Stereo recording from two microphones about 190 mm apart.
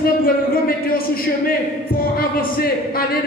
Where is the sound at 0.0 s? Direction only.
50° left (ahead or behind).